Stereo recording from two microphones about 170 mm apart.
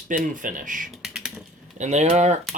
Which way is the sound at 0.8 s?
Centre (ahead or behind).